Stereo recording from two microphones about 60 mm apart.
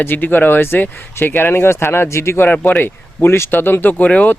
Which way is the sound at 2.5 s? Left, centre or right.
Left.